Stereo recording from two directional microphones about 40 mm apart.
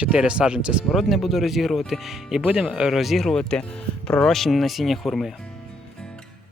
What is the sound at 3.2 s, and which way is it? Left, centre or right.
Speech, centre.